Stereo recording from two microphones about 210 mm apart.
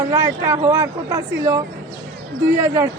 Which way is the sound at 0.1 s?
15° right (ahead or behind).